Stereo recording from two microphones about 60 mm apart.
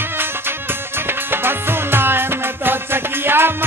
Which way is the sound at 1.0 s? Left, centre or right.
Right.